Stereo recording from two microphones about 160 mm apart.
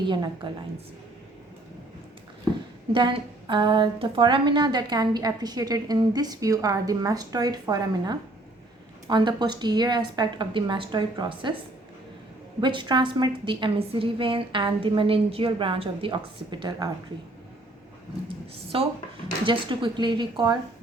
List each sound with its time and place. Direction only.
0.4 s a woman's voice: 30° right (ahead or behind)
2.9 s a woman's voice: 30° right (ahead or behind)
12.5 s a woman's voice: 30° right (ahead or behind)
18.3 s a woman's voice: 35° right (ahead or behind)